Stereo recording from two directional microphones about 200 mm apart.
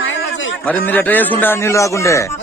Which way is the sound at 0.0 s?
75° left (ahead or behind).